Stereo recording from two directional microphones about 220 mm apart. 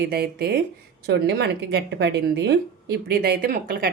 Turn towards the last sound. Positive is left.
turn(degrees=-40)  # may be behind; listen again after turning